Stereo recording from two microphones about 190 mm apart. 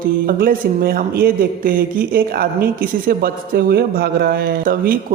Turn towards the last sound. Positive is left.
turn(degrees=-55)  # may be behind; listen again after turning